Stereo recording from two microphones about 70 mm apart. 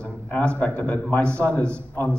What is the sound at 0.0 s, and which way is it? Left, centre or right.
A man's voice, centre.